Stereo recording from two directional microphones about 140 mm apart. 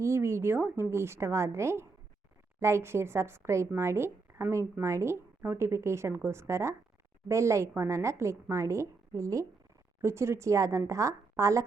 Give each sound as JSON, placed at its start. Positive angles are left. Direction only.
{"t": 0.0, "sound": "a woman's voice", "side_deg": -20}